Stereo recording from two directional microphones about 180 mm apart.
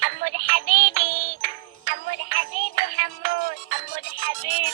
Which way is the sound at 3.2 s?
50° right (ahead or behind).